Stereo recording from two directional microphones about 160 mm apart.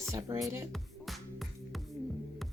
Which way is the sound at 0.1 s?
20° right (ahead or behind).